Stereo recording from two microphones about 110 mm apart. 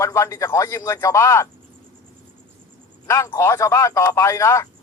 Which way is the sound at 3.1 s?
25° left (ahead or behind).